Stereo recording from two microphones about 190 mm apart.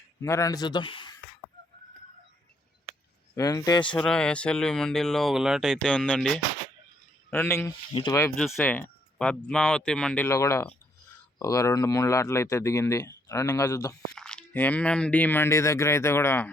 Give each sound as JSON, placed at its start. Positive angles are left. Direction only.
{"t": 0.2, "sound": "speech", "side_deg": 15}
{"t": 3.3, "sound": "speech", "side_deg": 20}
{"t": 3.9, "sound": "speech", "side_deg": 5}
{"t": 14.2, "sound": "speech", "side_deg": 5}